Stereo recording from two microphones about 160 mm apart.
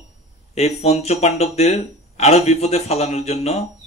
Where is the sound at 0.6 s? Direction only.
40° left (ahead or behind).